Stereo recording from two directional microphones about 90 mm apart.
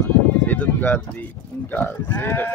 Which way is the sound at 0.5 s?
20° left (ahead or behind).